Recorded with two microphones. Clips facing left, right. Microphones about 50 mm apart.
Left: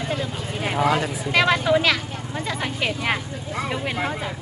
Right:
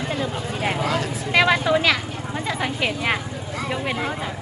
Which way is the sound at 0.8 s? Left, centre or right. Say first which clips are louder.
Left 7 dB; left.